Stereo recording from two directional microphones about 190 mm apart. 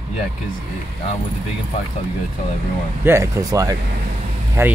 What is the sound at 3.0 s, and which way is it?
Speech, 15° right (ahead or behind).